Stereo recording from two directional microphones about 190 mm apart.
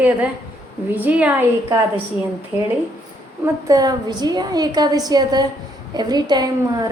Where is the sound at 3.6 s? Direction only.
20° right (ahead or behind).